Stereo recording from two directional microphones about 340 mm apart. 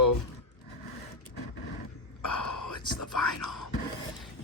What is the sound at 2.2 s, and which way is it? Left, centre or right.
Whispering, left.